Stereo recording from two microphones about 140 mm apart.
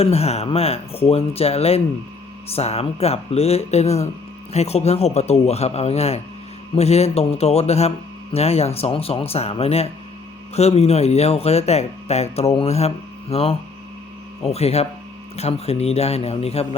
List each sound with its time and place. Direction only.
0.0 s speech: 45° left (ahead or behind)